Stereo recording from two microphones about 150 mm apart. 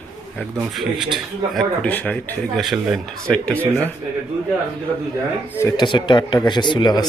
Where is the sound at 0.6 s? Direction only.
Centre (ahead or behind).